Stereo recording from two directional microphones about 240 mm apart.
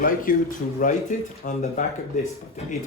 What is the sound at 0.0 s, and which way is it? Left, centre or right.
A man's voice, left.